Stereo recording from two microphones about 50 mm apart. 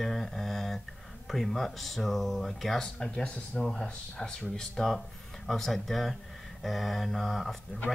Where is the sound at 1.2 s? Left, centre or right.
Centre.